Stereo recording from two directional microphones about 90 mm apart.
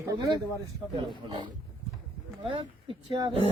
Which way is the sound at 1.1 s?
55° right (ahead or behind).